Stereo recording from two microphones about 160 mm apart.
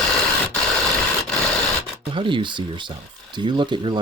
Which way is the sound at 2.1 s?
30° right (ahead or behind).